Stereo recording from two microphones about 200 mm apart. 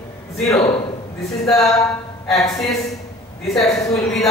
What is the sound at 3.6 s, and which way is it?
Speech, 15° left (ahead or behind).